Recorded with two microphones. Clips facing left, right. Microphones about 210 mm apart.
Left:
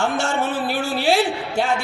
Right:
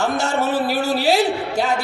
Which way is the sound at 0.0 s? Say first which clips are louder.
Right 1 dB; 40° right (ahead or behind).